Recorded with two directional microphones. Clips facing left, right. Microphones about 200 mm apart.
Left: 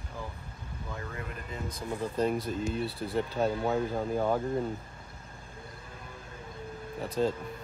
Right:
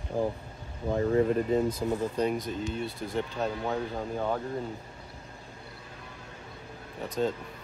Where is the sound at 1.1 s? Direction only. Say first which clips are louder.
Right 16 dB; 40° right (ahead or behind).